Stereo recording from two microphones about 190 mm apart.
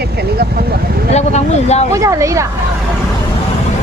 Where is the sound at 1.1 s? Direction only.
35° left (ahead or behind).